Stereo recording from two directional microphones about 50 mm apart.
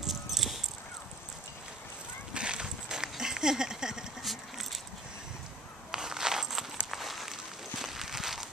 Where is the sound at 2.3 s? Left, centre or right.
Centre.